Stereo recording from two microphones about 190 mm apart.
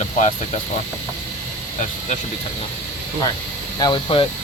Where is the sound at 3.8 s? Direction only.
25° left (ahead or behind).